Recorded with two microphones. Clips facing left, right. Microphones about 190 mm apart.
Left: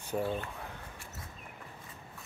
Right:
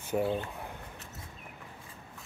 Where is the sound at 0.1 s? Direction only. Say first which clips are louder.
Right 3 dB; 15° right (ahead or behind).